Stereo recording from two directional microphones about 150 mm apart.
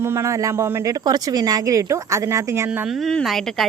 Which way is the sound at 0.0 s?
15° right (ahead or behind).